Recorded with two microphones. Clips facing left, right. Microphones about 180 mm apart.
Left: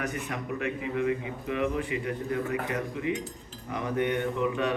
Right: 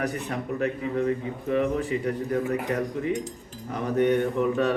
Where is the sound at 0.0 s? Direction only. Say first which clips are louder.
Right 4 dB; 35° right (ahead or behind).